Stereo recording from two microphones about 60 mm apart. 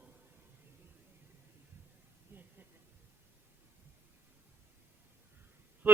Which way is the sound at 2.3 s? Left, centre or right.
Right.